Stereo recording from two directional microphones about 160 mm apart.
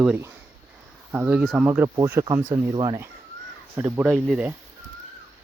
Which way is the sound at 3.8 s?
10° right (ahead or behind).